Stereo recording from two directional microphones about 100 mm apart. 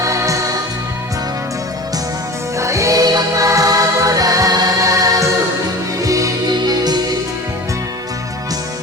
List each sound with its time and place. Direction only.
0.0 s music: 30° right (ahead or behind)
2.6 s music: 30° right (ahead or behind)